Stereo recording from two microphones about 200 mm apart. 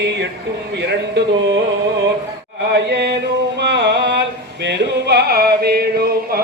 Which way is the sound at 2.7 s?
55° right (ahead or behind).